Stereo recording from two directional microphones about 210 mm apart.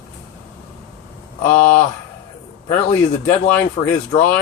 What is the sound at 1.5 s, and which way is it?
Speech, 5° left (ahead or behind).